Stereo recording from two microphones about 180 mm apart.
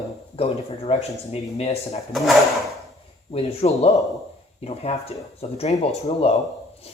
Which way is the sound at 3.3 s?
35° left (ahead or behind).